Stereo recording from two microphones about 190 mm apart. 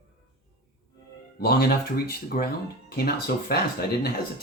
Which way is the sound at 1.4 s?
55° left (ahead or behind).